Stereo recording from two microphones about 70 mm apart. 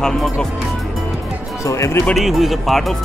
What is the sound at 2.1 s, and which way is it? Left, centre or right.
Speech, centre.